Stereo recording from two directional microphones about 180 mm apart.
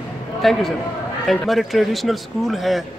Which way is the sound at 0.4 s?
Centre (ahead or behind).